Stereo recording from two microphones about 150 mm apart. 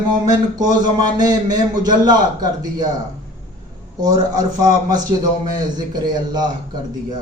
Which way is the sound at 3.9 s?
25° right (ahead or behind).